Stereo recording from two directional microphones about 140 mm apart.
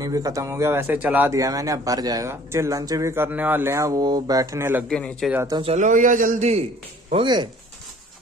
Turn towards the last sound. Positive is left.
turn(degrees=-30)  # may be behind; listen again after turning